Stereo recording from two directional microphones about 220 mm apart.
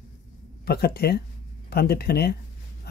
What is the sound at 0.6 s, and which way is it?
A man's voice, 45° left (ahead or behind).